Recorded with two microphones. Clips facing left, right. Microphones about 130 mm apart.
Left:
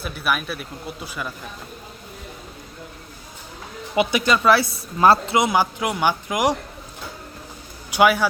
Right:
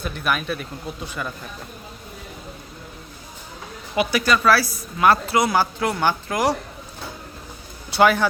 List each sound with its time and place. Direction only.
0.0 s speech: 5° left (ahead or behind)
3.9 s speech: 20° left (ahead or behind)
7.9 s a man's voice: 10° left (ahead or behind)